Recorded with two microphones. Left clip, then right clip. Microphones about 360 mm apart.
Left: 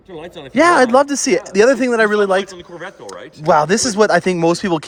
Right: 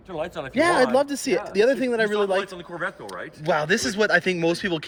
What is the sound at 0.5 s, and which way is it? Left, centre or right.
Speech, left.